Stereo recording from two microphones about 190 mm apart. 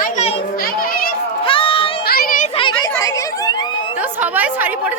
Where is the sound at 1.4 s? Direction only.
30° left (ahead or behind).